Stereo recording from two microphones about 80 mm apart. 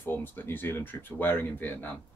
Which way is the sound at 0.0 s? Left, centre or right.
Left.